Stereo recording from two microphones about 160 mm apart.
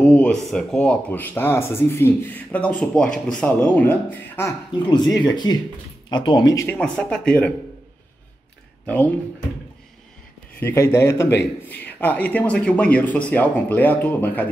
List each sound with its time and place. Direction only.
0.0 s a man's voice: 10° left (ahead or behind)
4.8 s speech: 25° left (ahead or behind)
6.8 s speech: 5° left (ahead or behind)
8.8 s speech: 10° left (ahead or behind)
10.6 s a man's voice: 15° left (ahead or behind)